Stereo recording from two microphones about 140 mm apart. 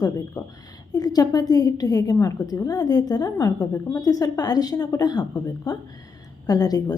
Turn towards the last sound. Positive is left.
turn(degrees=30)  # may be behind; listen again after turning